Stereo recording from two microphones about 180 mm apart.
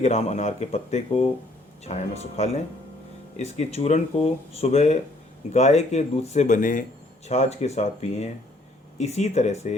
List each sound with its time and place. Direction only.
0.0 s speech: 40° left (ahead or behind)